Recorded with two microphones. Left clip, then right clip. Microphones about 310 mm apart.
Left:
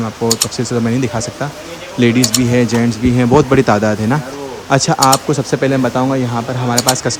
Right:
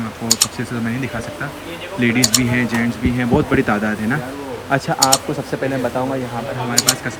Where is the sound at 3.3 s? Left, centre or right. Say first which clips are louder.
Left 6 dB; right.